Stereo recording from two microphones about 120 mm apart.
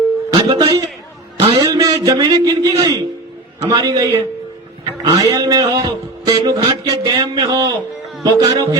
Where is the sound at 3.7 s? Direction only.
40° right (ahead or behind).